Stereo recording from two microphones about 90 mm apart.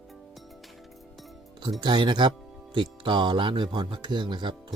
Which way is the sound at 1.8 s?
55° right (ahead or behind).